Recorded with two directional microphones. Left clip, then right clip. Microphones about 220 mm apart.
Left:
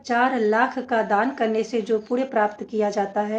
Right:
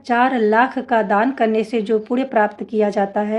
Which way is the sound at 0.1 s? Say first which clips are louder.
Right 4 dB; 45° right (ahead or behind).